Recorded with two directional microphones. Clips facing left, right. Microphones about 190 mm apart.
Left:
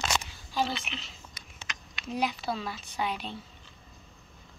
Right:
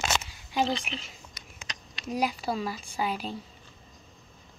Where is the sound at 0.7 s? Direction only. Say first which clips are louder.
Right 3 dB; 35° right (ahead or behind).